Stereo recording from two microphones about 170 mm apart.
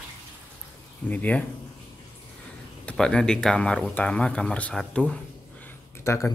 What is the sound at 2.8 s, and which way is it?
Speech, 5° left (ahead or behind).